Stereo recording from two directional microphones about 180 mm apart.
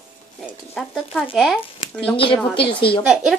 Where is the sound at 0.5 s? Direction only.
Centre (ahead or behind).